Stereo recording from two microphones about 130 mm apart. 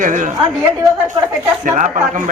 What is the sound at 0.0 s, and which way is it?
Speech, 75° right (ahead or behind).